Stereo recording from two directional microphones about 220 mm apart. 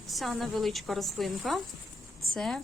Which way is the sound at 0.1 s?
Centre (ahead or behind).